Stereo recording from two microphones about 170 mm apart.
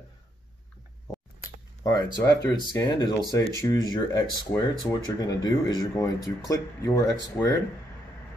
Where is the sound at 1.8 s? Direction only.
20° left (ahead or behind).